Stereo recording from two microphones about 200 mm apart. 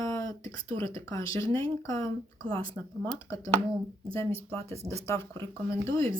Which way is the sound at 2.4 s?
25° right (ahead or behind).